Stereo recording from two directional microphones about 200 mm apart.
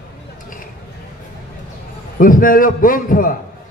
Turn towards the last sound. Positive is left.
turn(degrees=45)  # may be behind; listen again after turning